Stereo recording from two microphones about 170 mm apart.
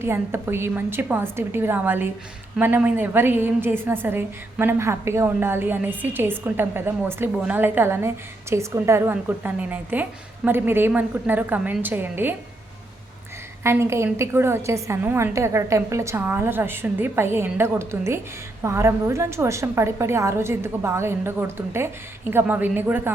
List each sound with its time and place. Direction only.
0.0 s a woman's voice: 15° right (ahead or behind)
13.7 s a woman's voice: 15° right (ahead or behind)